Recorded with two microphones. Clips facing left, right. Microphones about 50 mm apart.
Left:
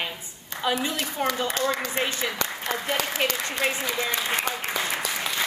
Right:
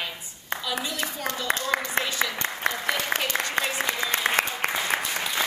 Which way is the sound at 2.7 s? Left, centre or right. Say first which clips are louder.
Left 3 dB; left.